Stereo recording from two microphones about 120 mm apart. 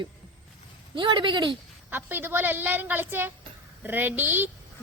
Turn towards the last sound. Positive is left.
turn(degrees=-15)  # may be behind; listen again after turning